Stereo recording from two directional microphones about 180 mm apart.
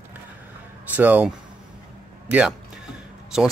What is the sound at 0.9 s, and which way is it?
A man's voice, 10° right (ahead or behind).